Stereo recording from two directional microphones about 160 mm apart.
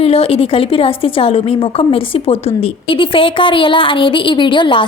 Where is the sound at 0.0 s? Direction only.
35° left (ahead or behind).